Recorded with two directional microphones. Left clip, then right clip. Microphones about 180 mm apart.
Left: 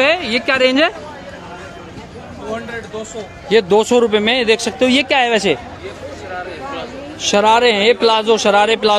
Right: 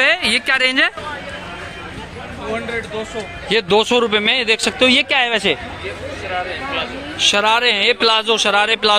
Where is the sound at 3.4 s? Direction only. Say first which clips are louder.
Left 3 dB; 20° left (ahead or behind).